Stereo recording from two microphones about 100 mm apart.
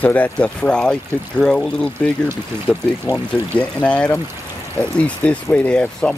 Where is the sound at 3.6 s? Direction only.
10° left (ahead or behind).